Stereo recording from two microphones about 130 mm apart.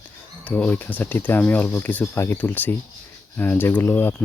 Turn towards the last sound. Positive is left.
turn(degrees=15)  # may be behind; listen again after turning